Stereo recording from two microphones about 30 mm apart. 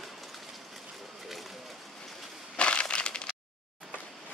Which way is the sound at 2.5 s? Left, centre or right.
Left.